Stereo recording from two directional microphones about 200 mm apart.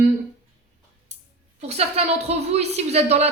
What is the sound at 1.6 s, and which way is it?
Speech, 30° right (ahead or behind).